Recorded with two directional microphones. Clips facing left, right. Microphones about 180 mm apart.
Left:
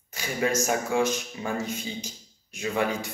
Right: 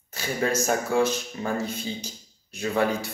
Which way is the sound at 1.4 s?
35° right (ahead or behind).